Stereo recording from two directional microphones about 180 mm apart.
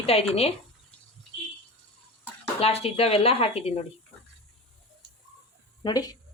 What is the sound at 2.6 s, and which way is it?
A woman's voice, 35° left (ahead or behind).